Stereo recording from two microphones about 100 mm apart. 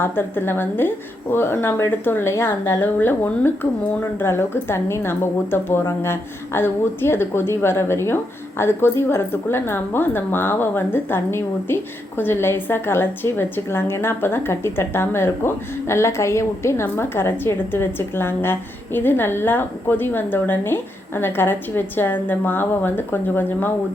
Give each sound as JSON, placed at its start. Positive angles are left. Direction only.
{"t": 0.0, "sound": "a woman's voice", "side_deg": 20}